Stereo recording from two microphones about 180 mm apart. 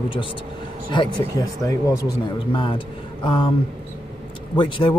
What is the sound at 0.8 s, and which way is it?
A man's voice, 25° left (ahead or behind).